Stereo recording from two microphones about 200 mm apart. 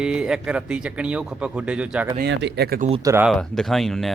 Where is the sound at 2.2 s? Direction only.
60° right (ahead or behind).